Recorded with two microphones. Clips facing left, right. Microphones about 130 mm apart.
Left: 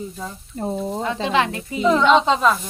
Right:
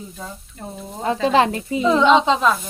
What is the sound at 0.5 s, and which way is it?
Speech, 35° left (ahead or behind).